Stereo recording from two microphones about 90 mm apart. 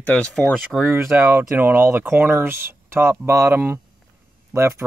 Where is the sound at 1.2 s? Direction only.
25° right (ahead or behind).